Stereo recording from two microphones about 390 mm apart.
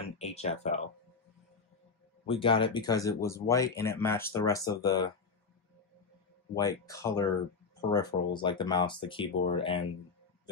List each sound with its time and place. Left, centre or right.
0.0 s speech: centre
2.2 s speech: centre
6.5 s speech: centre